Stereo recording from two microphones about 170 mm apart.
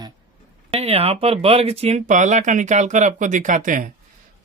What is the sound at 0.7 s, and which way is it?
Speech, 35° right (ahead or behind).